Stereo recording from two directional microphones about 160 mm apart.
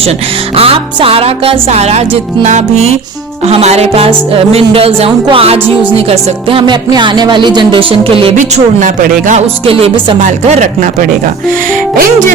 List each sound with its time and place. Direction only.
0.5 s music: 35° right (ahead or behind)
8.4 s speech: 55° right (ahead or behind)
9.6 s speech: 40° right (ahead or behind)